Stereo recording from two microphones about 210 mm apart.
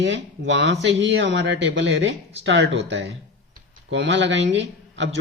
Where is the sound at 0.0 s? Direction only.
55° right (ahead or behind).